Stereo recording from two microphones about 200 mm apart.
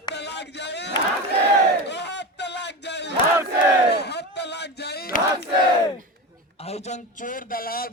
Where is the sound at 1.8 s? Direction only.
60° left (ahead or behind).